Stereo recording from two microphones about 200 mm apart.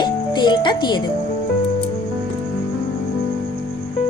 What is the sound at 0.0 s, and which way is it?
Music, 20° left (ahead or behind).